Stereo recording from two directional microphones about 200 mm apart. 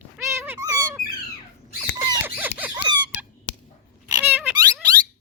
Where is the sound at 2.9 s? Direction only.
20° right (ahead or behind).